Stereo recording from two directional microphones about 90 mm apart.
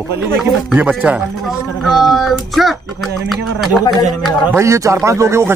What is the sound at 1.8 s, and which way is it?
Speech, centre (ahead or behind).